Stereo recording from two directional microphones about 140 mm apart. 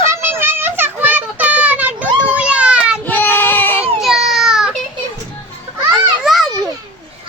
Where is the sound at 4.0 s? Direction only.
Centre (ahead or behind).